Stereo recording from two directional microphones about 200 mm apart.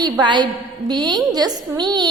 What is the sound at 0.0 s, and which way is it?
A woman's voice, 20° right (ahead or behind).